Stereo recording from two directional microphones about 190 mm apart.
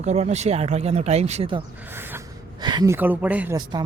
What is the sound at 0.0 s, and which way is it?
Speech, 35° right (ahead or behind).